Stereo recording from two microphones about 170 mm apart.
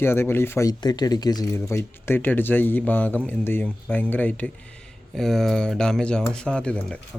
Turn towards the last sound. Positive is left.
turn(degrees=5)  # may be behind; listen again after turning